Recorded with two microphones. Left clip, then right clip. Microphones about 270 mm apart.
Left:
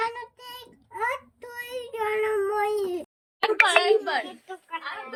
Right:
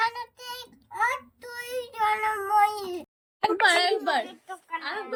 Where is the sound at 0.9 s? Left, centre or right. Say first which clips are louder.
Right 2 dB; right.